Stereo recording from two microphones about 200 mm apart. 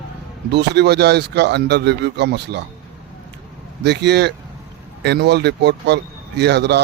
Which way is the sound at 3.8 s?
55° right (ahead or behind).